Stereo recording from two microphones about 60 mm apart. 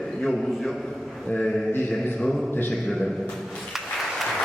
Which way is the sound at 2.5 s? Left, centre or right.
Left.